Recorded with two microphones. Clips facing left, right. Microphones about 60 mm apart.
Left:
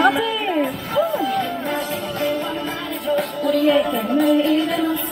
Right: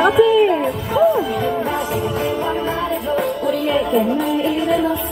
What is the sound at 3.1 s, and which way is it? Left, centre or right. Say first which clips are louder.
Music: left 2 dB; centre.